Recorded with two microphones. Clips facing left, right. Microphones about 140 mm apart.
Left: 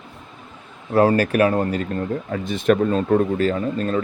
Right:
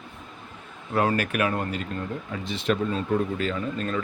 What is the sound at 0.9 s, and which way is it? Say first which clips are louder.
Speech: left 8 dB; 35° left (ahead or behind).